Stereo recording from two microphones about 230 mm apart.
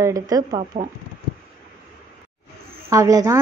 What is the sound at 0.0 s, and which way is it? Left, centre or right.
Speech, centre.